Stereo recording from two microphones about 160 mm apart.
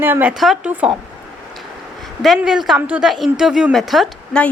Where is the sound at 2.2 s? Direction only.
Centre (ahead or behind).